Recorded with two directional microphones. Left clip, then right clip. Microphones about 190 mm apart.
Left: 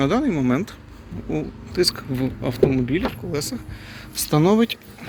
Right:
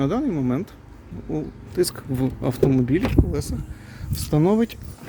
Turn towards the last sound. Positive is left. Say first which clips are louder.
# left 2 dB
turn(degrees=-25)  # may be behind; listen again after turning